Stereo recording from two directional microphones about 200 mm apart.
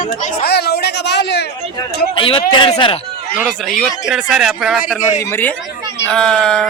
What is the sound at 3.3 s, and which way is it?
A man's voice, 5° right (ahead or behind).